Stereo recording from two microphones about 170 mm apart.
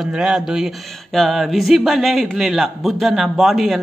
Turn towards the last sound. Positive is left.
turn(degrees=0)  # may be behind; listen again after turning